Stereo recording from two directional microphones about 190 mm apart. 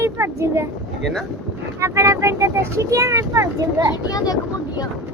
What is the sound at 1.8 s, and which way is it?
Speech, 15° right (ahead or behind).